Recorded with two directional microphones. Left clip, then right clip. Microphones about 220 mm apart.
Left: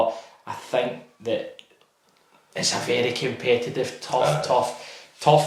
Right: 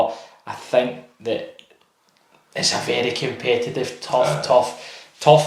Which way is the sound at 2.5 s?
20° right (ahead or behind).